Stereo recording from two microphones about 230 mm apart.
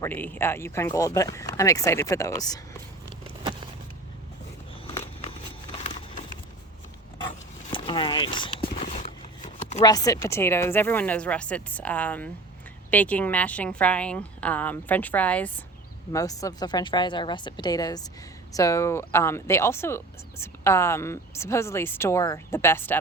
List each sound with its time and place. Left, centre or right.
0.0 s a woman's voice: centre
7.7 s a sound: left
9.8 s a woman's voice: centre